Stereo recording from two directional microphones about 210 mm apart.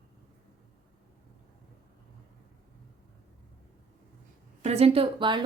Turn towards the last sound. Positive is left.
turn(degrees=-25)  # may be behind; listen again after turning